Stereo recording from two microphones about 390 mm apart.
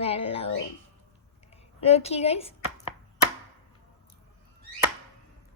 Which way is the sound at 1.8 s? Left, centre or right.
Centre.